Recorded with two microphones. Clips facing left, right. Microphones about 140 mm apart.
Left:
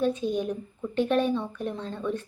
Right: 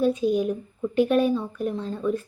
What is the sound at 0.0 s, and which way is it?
A woman's voice, 10° right (ahead or behind).